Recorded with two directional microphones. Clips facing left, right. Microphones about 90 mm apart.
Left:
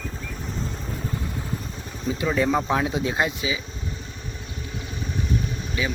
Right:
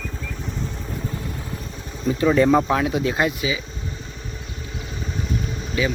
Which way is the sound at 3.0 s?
20° left (ahead or behind).